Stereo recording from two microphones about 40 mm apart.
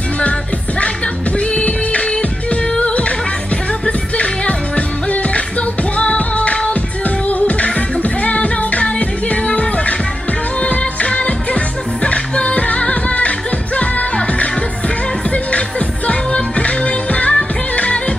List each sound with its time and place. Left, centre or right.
1.5 s music: left
16.5 s music: left